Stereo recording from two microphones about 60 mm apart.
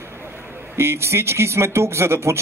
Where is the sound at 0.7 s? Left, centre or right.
Right.